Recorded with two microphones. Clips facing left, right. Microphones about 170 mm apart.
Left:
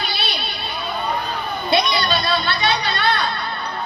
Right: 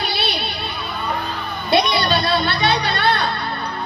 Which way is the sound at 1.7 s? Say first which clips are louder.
Right 3 dB; 60° right (ahead or behind).